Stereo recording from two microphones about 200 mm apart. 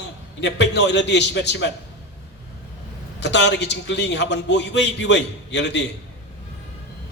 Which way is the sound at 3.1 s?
60° left (ahead or behind).